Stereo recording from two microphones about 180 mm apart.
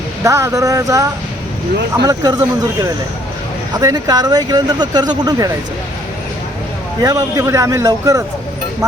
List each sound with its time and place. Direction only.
0.3 s speech: 15° right (ahead or behind)
7.0 s speech: 20° right (ahead or behind)